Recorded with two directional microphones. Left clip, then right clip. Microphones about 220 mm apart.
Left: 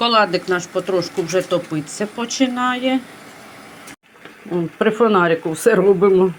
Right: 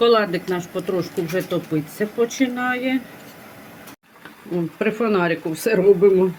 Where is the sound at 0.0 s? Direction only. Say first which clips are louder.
Left 1 dB; centre (ahead or behind).